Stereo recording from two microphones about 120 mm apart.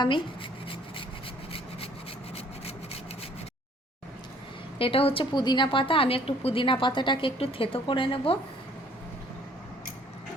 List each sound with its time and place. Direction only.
4.8 s a woman's voice: 50° left (ahead or behind)